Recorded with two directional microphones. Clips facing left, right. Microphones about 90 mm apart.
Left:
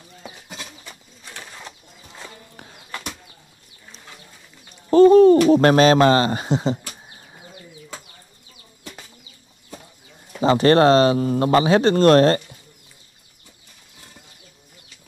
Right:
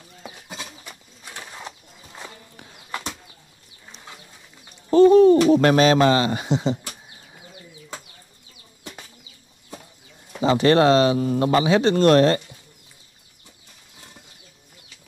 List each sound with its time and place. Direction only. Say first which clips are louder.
0.8 s pigeon: even; 10° right (ahead or behind)
2.5 s bird: left 2 dB; 40° left (ahead or behind)
4.9 s a sound: left 2 dB; 40° left (ahead or behind)
5.5 s speech: left 2 dB; 40° left (ahead or behind)
10.4 s speech: left 2 dB; 40° left (ahead or behind)